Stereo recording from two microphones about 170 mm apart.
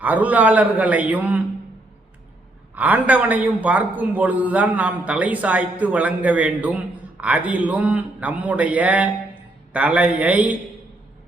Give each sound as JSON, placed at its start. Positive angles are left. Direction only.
{"t": 0.0, "sound": "a man's voice", "side_deg": -10}
{"t": 2.7, "sound": "a man's voice", "side_deg": -10}